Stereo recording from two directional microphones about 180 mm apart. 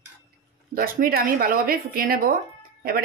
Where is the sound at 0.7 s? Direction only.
55° right (ahead or behind).